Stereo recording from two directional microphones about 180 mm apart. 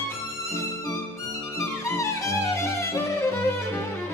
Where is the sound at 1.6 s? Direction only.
15° left (ahead or behind).